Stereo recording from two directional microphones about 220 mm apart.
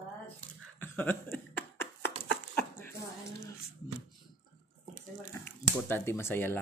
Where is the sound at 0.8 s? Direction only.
10° left (ahead or behind).